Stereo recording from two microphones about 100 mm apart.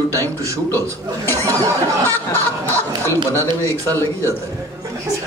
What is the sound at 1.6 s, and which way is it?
Speech, 30° right (ahead or behind).